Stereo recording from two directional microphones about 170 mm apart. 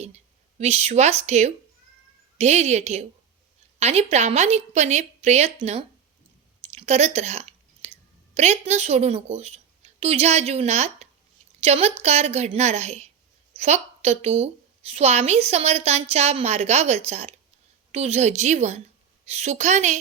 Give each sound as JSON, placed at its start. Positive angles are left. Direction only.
{"t": 0.6, "sound": "a woman's voice", "side_deg": -40}